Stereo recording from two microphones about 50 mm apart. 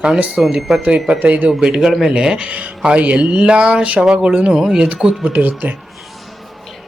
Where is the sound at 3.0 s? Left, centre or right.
Right; by 4.8 s centre.